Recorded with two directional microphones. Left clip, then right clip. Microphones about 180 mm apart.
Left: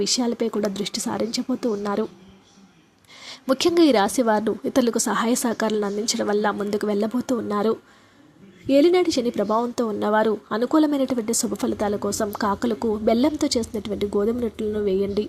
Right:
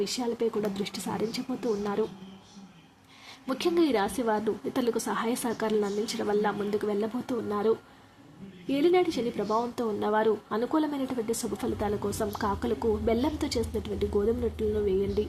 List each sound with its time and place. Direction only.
0.0 s speech: 35° left (ahead or behind)
3.2 s speech: 35° left (ahead or behind)